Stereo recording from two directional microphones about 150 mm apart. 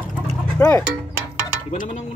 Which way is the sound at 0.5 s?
20° left (ahead or behind).